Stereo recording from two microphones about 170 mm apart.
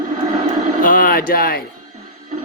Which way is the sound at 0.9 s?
55° left (ahead or behind).